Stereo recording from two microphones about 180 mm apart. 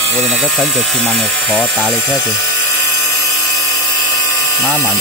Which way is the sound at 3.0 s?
20° left (ahead or behind).